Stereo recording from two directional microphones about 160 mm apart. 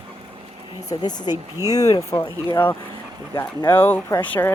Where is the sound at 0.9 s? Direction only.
25° left (ahead or behind).